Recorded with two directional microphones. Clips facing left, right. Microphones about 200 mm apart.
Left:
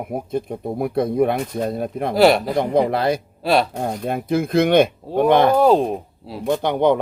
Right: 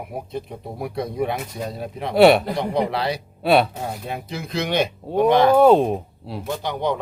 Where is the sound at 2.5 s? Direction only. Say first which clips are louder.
Left 5 dB; 50° left (ahead or behind).